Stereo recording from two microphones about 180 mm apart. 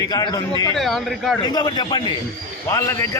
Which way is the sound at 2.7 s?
15° left (ahead or behind).